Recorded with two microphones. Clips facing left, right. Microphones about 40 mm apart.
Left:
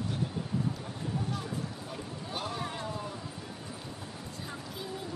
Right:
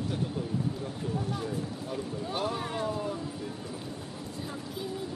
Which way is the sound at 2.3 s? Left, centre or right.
Centre.